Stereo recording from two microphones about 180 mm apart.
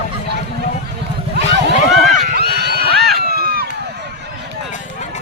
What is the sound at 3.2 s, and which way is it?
Run, 55° right (ahead or behind).